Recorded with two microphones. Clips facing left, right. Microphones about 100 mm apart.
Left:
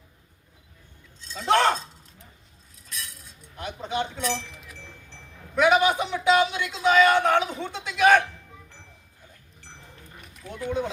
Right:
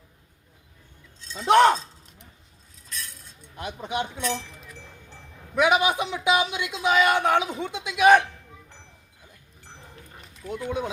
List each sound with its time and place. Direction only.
1.4 s a man's voice: 15° right (ahead or behind)
3.6 s a man's voice: 15° right (ahead or behind)
5.5 s a man's voice: 15° right (ahead or behind)
10.5 s a man's voice: 15° right (ahead or behind)